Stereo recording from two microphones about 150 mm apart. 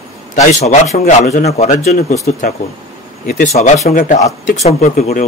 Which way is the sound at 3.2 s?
70° left (ahead or behind).